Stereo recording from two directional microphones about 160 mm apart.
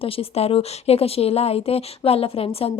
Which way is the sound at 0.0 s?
35° left (ahead or behind).